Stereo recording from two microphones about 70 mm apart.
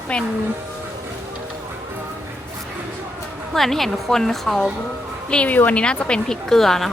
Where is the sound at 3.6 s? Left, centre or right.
Centre.